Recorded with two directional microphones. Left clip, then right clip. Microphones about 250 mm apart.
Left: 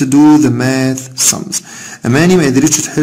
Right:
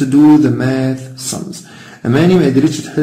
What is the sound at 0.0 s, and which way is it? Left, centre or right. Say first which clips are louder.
Speech: left 1 dB; left.